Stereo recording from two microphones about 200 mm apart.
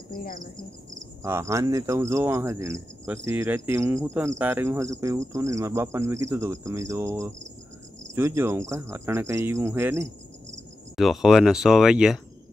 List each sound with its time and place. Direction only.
0.1 s cricket: 45° left (ahead or behind)
1.2 s cricket: 15° right (ahead or behind)
11.0 s speech: centre (ahead or behind)